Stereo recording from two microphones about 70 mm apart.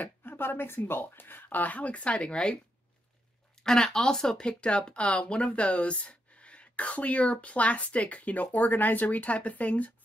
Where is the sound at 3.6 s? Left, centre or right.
Centre.